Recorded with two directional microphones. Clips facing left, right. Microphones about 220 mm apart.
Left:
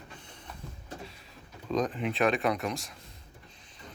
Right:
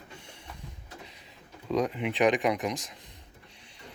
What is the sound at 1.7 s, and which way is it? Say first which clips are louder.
Speech: right 1 dB; 10° right (ahead or behind).